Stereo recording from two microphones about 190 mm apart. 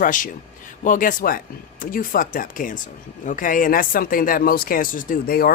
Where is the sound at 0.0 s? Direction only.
45° left (ahead or behind).